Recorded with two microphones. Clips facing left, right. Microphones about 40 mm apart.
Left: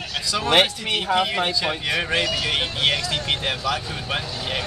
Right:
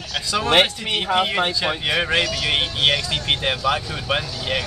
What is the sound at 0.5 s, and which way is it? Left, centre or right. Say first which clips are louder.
Speech: right 1 dB; centre.